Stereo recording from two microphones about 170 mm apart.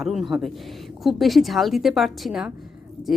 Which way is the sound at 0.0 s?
Centre (ahead or behind).